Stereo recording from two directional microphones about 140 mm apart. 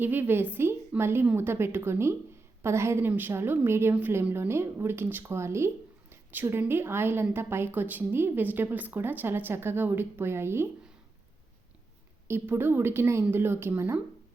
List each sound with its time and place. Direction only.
0.0 s a woman's voice: 15° right (ahead or behind)
12.3 s a woman's voice: 15° right (ahead or behind)